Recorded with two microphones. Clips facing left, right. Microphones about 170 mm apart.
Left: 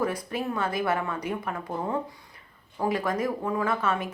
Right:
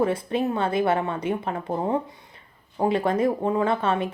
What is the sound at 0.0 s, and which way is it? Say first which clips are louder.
Speech: right 6 dB; 25° right (ahead or behind).